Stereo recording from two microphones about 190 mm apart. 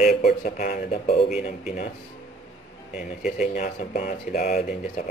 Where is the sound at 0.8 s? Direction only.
30° left (ahead or behind).